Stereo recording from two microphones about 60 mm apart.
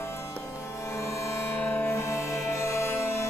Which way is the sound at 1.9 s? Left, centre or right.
Left.